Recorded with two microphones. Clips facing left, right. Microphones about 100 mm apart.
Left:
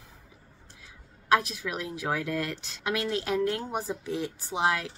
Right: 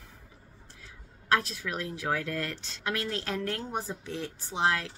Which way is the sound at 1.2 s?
15° left (ahead or behind).